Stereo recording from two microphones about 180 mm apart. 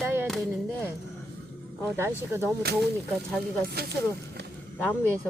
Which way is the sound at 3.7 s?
65° right (ahead or behind).